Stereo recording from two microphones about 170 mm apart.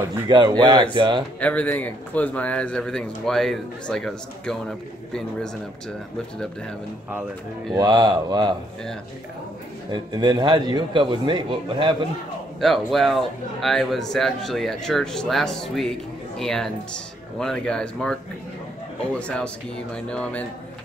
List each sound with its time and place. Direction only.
0.1 s a man's voice: 25° right (ahead or behind)
1.4 s speech: 10° left (ahead or behind)
7.7 s a man's voice: 25° right (ahead or behind)
9.8 s a man's voice: 25° right (ahead or behind)
12.5 s speech: centre (ahead or behind)
19.1 s speech: 5° left (ahead or behind)